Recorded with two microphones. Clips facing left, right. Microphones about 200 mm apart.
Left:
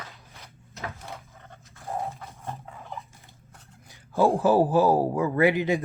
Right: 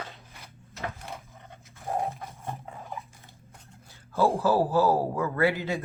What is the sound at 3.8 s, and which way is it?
Speech, 15° left (ahead or behind).